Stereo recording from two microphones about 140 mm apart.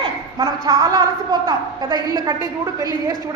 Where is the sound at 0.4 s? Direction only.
25° right (ahead or behind).